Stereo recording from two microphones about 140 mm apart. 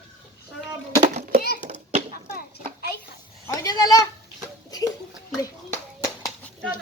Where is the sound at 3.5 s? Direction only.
25° left (ahead or behind).